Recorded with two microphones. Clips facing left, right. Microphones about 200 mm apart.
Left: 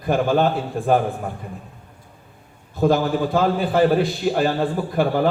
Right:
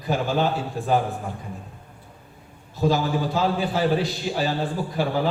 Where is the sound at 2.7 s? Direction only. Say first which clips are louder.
Left 4 dB; 55° left (ahead or behind).